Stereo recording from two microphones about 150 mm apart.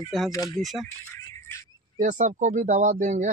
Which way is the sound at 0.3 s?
20° left (ahead or behind).